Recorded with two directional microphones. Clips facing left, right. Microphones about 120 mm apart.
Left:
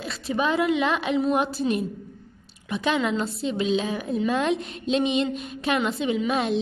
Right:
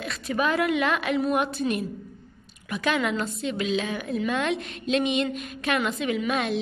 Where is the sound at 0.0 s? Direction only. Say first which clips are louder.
Left 1 dB; 30° left (ahead or behind).